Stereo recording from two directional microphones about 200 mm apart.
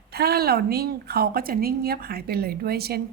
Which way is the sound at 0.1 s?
50° right (ahead or behind).